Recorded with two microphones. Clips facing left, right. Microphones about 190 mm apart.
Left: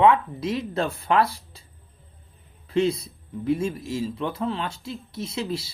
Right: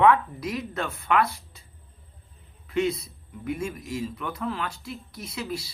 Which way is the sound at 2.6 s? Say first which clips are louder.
Left 3 dB; 30° left (ahead or behind).